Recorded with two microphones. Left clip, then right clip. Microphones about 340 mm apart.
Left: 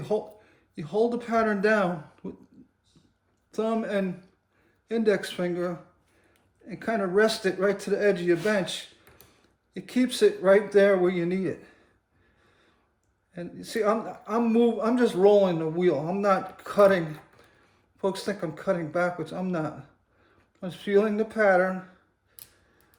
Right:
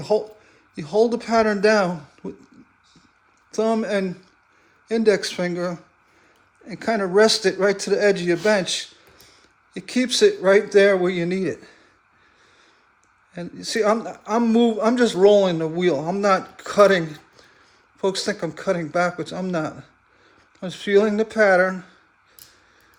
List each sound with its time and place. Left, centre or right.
0.8 s speech: right
3.5 s speech: right
13.3 s speech: right
18.0 s speech: right